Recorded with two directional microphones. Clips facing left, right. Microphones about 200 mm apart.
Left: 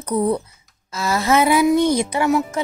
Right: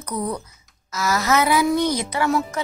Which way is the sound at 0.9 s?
30° left (ahead or behind).